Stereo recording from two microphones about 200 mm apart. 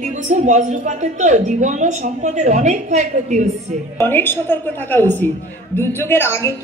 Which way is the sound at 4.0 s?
10° left (ahead or behind).